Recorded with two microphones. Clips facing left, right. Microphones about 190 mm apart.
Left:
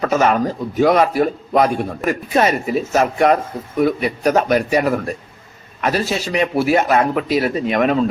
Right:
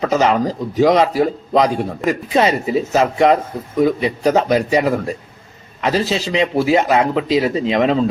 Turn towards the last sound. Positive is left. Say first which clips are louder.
# right 1 dB
turn(degrees=-25)  # may be behind; listen again after turning